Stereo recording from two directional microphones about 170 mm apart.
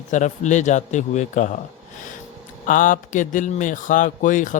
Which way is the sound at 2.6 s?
50° left (ahead or behind).